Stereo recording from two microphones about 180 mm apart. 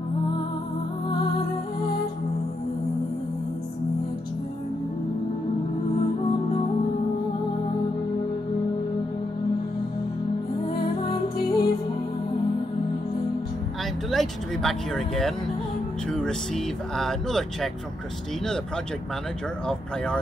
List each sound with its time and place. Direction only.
11.3 s music: 60° left (ahead or behind)
14.1 s speech: centre (ahead or behind)